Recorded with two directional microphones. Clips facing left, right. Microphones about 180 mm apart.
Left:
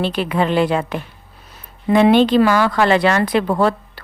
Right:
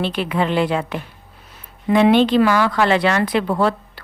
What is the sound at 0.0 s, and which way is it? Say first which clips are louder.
A woman's voice: left 2 dB; 40° left (ahead or behind).